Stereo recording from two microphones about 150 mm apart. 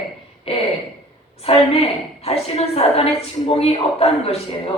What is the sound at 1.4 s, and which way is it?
A woman's voice, 40° left (ahead or behind).